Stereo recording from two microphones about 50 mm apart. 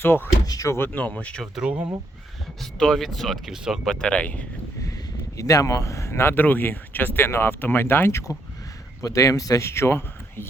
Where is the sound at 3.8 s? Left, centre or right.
Centre.